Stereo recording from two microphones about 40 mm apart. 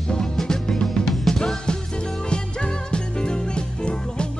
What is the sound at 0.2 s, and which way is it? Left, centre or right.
Music, centre.